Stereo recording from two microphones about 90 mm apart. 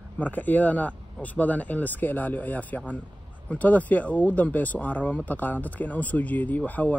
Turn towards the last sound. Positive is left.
turn(degrees=15)  # may be behind; listen again after turning